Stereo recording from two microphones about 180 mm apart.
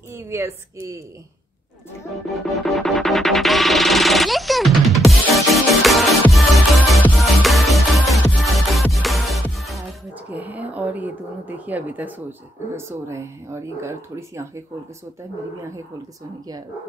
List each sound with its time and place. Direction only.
0.1 s speech: 15° right (ahead or behind)
2.2 s music: centre (ahead or behind)
10.3 s speech: 10° right (ahead or behind)